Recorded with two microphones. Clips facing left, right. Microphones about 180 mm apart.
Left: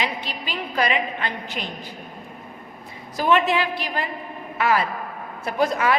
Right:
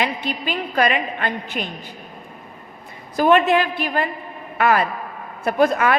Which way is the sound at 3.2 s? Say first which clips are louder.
Right 4 dB; 50° right (ahead or behind).